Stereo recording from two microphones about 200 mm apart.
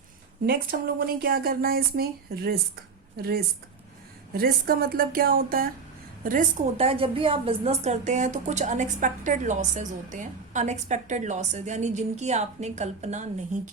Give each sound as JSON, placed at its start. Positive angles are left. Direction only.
{"t": 0.4, "sound": "speech", "side_deg": -50}
{"t": 6.7, "sound": "a woman's voice", "side_deg": -30}